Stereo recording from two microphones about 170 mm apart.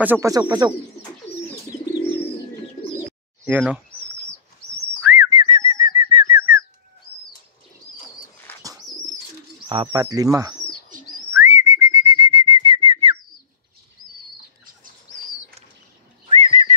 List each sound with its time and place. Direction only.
0.0 s speech: 15° right (ahead or behind)
5.0 s whistling: 15° right (ahead or behind)
5.3 s bird: 30° right (ahead or behind)
8.5 s bird: 10° left (ahead or behind)
9.7 s speech: 30° right (ahead or behind)
10.0 s speech: 20° right (ahead or behind)
10.9 s bird: 50° right (ahead or behind)
11.3 s whistling: 15° right (ahead or behind)
16.3 s a sound: 40° right (ahead or behind)